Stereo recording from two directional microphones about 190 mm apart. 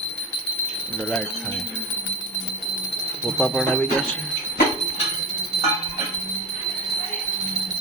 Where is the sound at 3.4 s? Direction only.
5° left (ahead or behind).